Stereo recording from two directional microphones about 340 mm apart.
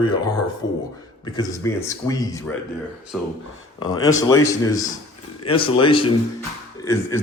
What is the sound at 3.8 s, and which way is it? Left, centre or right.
A man's voice, centre.